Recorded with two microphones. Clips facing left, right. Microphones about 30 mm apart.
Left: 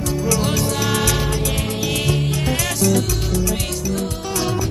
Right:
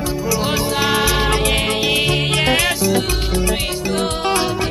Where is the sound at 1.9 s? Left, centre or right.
Right.